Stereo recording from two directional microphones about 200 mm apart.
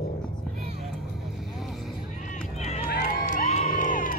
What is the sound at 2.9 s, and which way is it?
Crowd, 45° left (ahead or behind).